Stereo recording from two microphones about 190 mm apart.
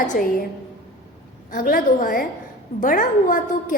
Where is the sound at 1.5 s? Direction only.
50° left (ahead or behind).